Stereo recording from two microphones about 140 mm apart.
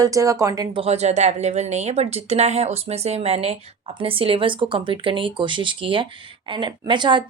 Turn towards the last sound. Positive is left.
turn(degrees=-35)  # may be behind; listen again after turning